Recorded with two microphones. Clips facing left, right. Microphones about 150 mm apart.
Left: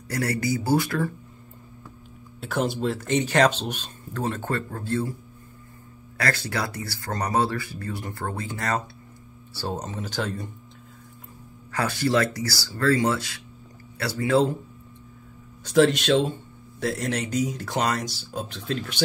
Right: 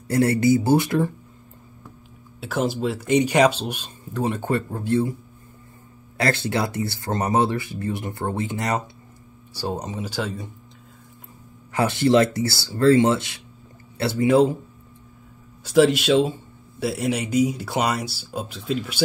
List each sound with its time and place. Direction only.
0.1 s speech: 25° right (ahead or behind)
2.4 s speech: centre (ahead or behind); by 5.1 s 20° right (ahead or behind)
6.1 s speech: 25° right (ahead or behind); by 10.5 s centre (ahead or behind)
11.7 s speech: 20° right (ahead or behind)
15.6 s speech: 5° right (ahead or behind)